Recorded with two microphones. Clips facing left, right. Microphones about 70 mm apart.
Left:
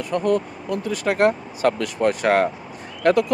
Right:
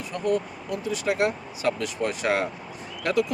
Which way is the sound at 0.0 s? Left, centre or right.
Left.